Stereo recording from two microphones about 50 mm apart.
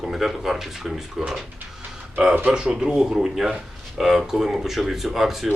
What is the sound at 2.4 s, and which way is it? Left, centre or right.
Speech, centre.